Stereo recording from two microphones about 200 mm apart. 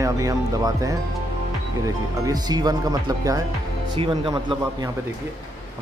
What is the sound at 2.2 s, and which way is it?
Speech, 20° right (ahead or behind).